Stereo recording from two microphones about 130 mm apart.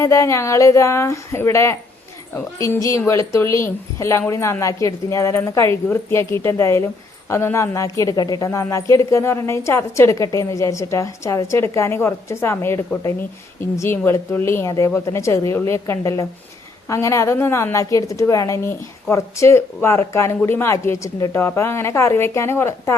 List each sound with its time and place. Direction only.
0.0 s a woman's voice: 20° left (ahead or behind)